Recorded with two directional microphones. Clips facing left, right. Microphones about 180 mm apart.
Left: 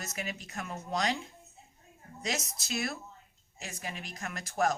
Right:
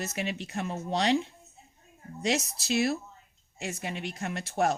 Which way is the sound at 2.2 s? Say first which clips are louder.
Right 7 dB; 30° right (ahead or behind).